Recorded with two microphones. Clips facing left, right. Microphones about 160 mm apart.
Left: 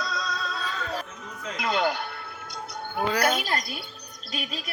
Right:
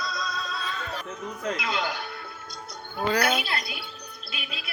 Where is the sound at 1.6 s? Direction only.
50° left (ahead or behind).